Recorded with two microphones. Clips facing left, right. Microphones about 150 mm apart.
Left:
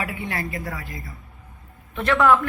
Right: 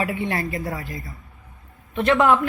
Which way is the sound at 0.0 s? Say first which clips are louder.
Right 4 dB; 25° right (ahead or behind).